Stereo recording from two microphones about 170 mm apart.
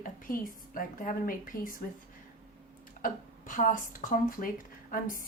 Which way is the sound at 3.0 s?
50° left (ahead or behind).